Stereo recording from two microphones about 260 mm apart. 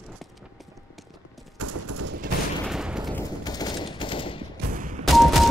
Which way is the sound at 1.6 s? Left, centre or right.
Right.